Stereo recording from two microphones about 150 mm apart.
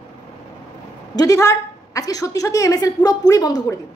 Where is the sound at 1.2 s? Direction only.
20° left (ahead or behind).